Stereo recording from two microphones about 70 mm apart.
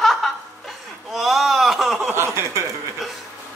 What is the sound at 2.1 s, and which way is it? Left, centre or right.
Speech, right.